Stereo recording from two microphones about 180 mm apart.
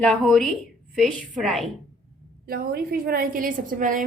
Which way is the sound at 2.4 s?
55° right (ahead or behind).